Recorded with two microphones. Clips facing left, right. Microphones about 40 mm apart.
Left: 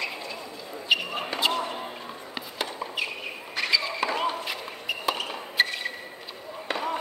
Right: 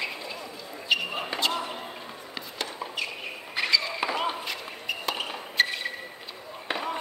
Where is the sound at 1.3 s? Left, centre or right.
Centre.